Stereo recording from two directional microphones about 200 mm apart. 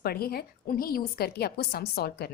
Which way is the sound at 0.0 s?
50° left (ahead or behind).